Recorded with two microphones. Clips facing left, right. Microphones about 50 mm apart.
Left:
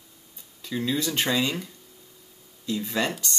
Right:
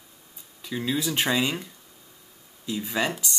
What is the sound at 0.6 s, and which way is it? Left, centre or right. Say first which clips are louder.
Speech: even; centre.